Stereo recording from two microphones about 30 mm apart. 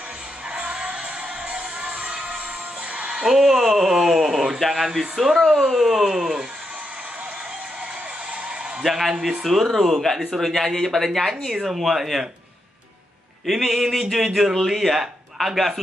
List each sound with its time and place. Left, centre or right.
0.5 s music: right
3.3 s speech: centre
4.6 s speech: centre
9.4 s speech: centre
11.5 s speech: centre
13.5 s speech: centre
14.5 s speech: centre